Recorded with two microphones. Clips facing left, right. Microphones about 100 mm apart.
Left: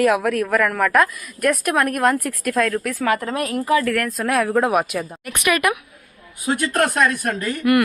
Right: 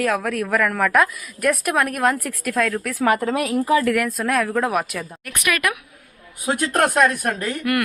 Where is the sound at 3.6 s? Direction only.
15° right (ahead or behind).